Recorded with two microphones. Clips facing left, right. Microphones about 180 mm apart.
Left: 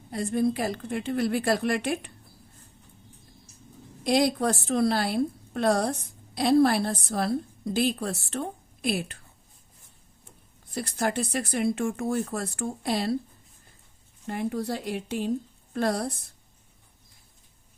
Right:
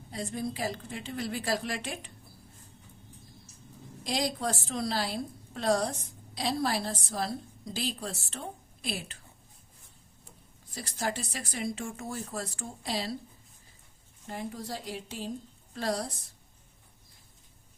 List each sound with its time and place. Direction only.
0.1 s a woman's voice: 60° left (ahead or behind)
4.0 s a woman's voice: 60° left (ahead or behind)
10.8 s a woman's voice: 55° left (ahead or behind)
14.3 s a woman's voice: 65° left (ahead or behind)